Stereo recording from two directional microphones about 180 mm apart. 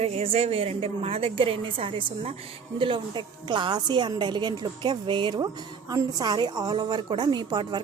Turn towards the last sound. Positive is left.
turn(degrees=-25)  # may be behind; listen again after turning